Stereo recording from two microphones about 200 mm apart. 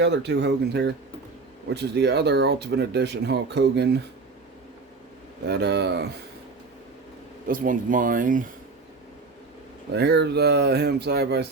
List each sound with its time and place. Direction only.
0.0 s speech: 60° right (ahead or behind)
5.5 s speech: 55° right (ahead or behind)
7.4 s speech: 45° right (ahead or behind)
9.9 s speech: 55° right (ahead or behind)